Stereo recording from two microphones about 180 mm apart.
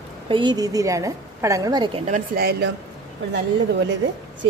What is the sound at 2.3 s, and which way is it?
Speech, 60° right (ahead or behind).